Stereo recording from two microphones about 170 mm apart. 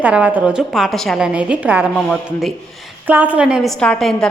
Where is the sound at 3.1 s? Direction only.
10° right (ahead or behind).